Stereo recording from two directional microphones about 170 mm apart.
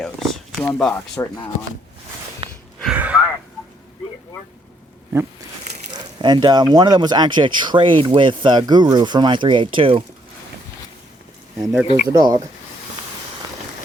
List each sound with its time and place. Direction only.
0.0 s a sound: 5° left (ahead or behind)
2.4 s a sound: 30° right (ahead or behind)
2.8 s gasp: 10° right (ahead or behind)
6.2 s speech: 25° right (ahead or behind)
11.6 s speech: centre (ahead or behind)
12.0 s speech: 20° right (ahead or behind)